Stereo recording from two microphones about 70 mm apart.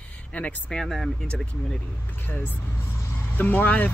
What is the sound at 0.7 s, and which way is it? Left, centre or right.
Speech, centre.